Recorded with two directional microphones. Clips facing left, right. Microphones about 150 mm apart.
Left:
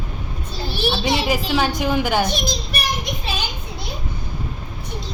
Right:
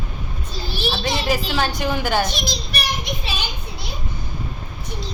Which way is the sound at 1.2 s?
10° left (ahead or behind).